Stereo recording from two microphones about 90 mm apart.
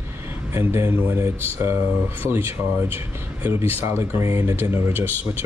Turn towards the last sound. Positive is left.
turn(degrees=-25)  # may be behind; listen again after turning